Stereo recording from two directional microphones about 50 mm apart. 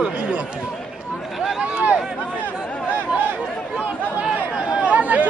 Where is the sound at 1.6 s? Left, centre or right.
Right.